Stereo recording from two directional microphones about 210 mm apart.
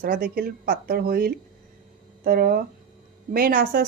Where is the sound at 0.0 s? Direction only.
45° right (ahead or behind).